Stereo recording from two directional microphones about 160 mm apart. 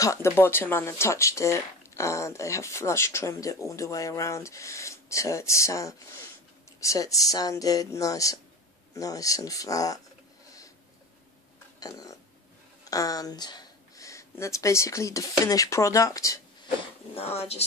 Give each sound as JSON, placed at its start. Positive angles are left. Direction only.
{"t": 0.0, "sound": "speech", "side_deg": 15}
{"t": 11.8, "sound": "speech", "side_deg": 20}
{"t": 16.6, "sound": "speech", "side_deg": 35}